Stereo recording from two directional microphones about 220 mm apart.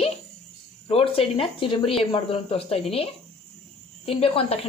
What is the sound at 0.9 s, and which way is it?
Speech, 25° left (ahead or behind).